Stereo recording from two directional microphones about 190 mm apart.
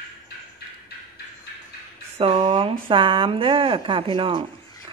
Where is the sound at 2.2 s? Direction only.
30° right (ahead or behind).